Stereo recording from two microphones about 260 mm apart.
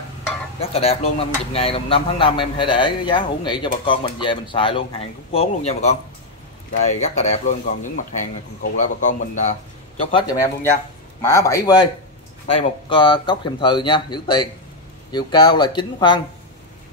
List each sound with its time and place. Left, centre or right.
0.6 s speech: left
10.1 s speech: centre